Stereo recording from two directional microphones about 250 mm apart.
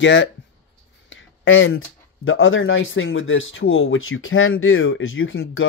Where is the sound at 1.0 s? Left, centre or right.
Left.